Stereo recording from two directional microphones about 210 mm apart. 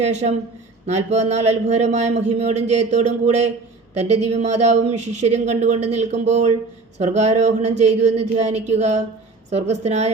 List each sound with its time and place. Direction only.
0.0 s speech: 30° right (ahead or behind)